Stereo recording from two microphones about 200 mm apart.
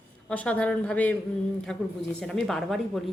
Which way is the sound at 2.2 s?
Centre (ahead or behind).